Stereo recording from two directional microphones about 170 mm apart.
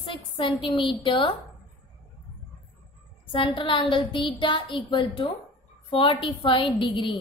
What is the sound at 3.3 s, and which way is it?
A woman's voice, 30° left (ahead or behind).